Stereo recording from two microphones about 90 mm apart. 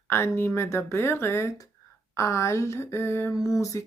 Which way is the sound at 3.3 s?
40° left (ahead or behind).